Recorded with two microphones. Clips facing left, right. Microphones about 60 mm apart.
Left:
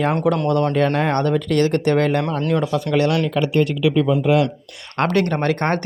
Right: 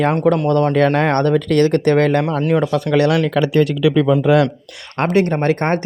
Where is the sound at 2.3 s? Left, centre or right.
Centre.